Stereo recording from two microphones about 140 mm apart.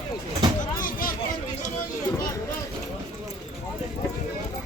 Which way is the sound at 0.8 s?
85° left.